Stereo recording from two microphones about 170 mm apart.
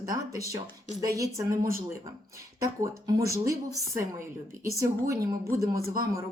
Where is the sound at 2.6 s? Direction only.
20° right (ahead or behind).